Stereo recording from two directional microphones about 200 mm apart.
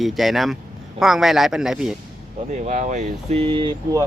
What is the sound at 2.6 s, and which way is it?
Speech, 35° right (ahead or behind).